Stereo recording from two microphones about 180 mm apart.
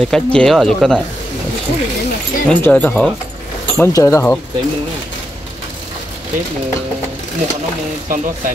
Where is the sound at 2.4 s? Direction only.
10° left (ahead or behind).